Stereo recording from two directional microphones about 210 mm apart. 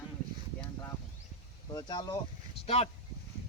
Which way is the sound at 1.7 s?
20° left (ahead or behind).